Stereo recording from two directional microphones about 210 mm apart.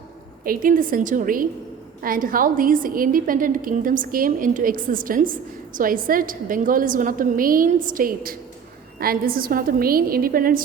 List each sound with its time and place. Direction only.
0.4 s a woman's voice: 40° right (ahead or behind)